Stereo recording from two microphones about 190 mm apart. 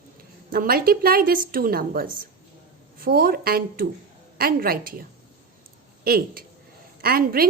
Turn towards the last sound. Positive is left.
turn(degrees=-50)  # may be behind; listen again after turning